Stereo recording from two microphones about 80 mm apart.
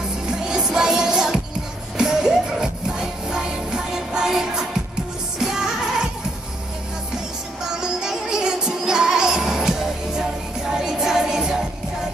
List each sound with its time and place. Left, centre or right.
0.3 s music: centre
7.8 s music: centre